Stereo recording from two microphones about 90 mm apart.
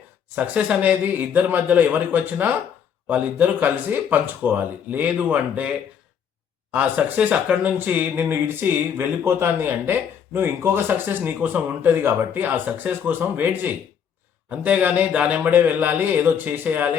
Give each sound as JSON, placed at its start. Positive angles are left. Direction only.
{"t": 0.3, "sound": "speech", "side_deg": -15}